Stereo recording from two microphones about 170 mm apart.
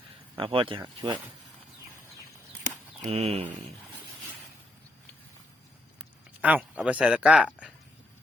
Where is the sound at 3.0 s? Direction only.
35° right (ahead or behind).